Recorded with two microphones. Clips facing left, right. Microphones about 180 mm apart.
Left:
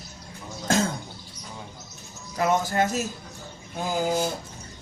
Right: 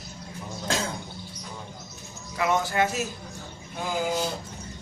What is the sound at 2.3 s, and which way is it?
Speech, 40° left (ahead or behind).